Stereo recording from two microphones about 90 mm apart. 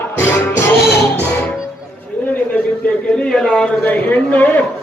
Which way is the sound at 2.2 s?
15° left (ahead or behind).